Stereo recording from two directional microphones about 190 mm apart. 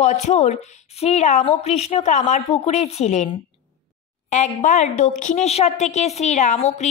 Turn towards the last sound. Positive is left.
turn(degrees=35)  # may be behind; listen again after turning